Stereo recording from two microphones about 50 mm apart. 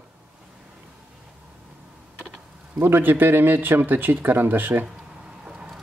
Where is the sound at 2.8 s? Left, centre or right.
Right.